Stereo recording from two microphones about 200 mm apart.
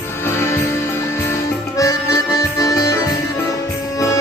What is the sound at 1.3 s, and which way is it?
Music, 15° left (ahead or behind).